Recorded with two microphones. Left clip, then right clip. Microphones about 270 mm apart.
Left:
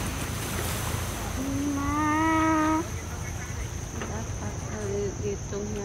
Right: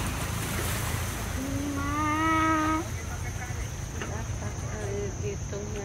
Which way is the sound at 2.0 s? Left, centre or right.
Left.